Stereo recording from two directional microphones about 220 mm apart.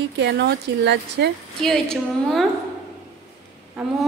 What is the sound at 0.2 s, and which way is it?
Speech, 50° right (ahead or behind).